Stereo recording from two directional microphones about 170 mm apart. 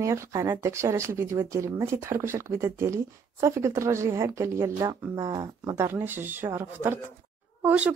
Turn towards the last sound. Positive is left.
turn(degrees=-10)  # may be behind; listen again after turning